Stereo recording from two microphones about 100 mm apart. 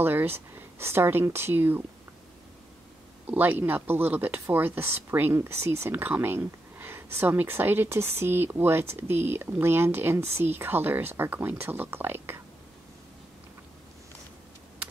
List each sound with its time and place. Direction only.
0.0 s speech: 20° right (ahead or behind)
3.3 s speech: 15° right (ahead or behind)